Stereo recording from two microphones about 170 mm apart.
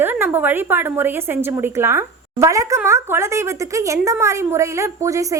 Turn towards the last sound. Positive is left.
turn(degrees=-20)  # may be behind; listen again after turning